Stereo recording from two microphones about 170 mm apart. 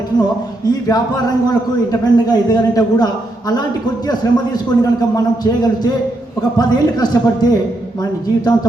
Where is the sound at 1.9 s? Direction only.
25° left (ahead or behind).